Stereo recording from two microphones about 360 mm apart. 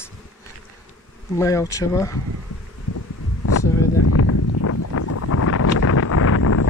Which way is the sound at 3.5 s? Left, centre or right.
Left.